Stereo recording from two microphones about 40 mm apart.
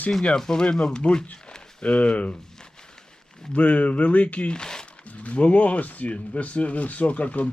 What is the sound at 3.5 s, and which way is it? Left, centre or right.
Speech, left.